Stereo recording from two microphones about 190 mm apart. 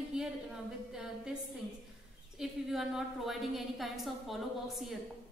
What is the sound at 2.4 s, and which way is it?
A woman's voice, centre (ahead or behind).